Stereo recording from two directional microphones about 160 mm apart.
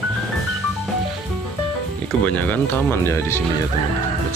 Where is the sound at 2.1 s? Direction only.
5° left (ahead or behind).